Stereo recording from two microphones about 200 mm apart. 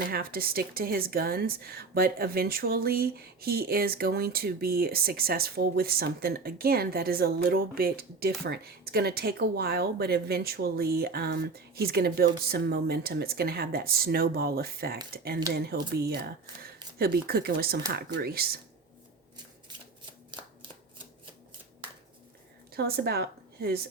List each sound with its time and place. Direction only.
0.1 s a woman's voice: 50° right (ahead or behind)
22.7 s a woman's voice: 50° right (ahead or behind)